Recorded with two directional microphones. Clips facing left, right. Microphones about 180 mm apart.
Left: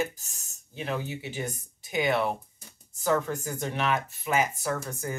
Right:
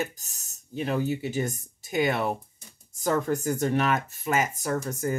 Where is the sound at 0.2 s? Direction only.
40° right (ahead or behind).